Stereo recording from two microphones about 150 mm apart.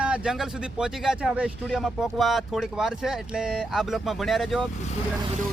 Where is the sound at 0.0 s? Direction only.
5° right (ahead or behind).